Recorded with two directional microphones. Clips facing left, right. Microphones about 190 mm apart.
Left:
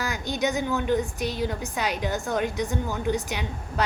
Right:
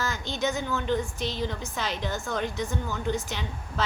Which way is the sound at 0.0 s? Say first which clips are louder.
Left 2 dB; 15° left (ahead or behind).